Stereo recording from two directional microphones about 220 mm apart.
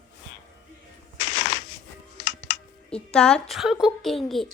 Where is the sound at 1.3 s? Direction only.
25° left (ahead or behind).